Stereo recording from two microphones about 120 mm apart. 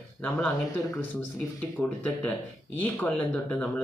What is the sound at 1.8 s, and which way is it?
Speech, 15° left (ahead or behind).